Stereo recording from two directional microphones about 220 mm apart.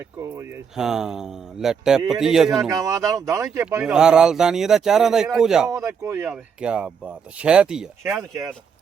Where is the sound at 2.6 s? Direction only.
15° right (ahead or behind).